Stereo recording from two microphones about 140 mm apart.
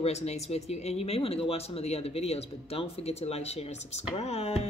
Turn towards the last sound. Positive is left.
turn(degrees=50)  # may be behind; listen again after turning